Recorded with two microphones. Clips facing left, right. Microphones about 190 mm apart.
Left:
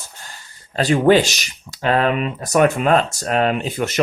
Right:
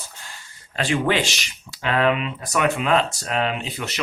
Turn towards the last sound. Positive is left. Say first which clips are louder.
# left 7 dB
turn(degrees=50)  # may be behind; listen again after turning